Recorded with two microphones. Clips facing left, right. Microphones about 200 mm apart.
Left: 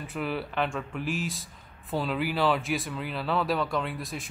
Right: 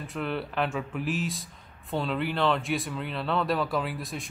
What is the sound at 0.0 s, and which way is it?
A man's voice, centre (ahead or behind).